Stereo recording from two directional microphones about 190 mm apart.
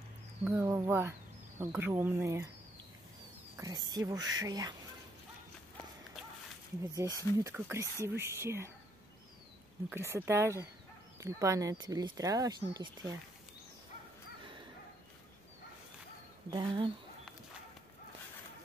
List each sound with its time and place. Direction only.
0.4 s speech: 10° right (ahead or behind)
3.5 s speech: 20° right (ahead or behind)
7.1 s speech: 15° left (ahead or behind)
7.4 s speech: 15° right (ahead or behind)
9.8 s speech: 15° right (ahead or behind)
16.4 s speech: 25° right (ahead or behind)